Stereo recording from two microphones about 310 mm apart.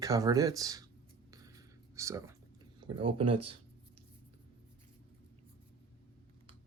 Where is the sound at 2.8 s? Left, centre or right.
Centre.